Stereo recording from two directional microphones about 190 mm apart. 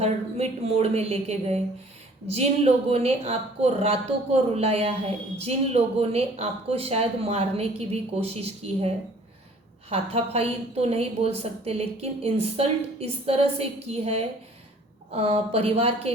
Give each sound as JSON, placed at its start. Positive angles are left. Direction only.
{"t": 0.0, "sound": "a woman's voice", "side_deg": -35}
{"t": 9.9, "sound": "a woman's voice", "side_deg": -30}